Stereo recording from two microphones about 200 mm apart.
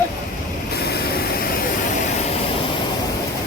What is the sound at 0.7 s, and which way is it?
Vehicle, 50° left (ahead or behind).